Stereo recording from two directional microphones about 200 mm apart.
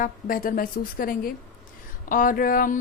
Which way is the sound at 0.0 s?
45° left (ahead or behind).